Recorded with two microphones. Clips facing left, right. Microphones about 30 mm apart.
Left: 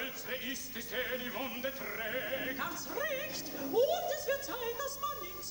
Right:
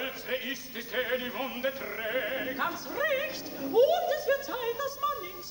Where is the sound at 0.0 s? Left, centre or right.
Right.